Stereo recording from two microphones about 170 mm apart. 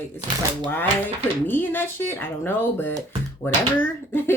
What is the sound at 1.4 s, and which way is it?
Speech, 10° left (ahead or behind).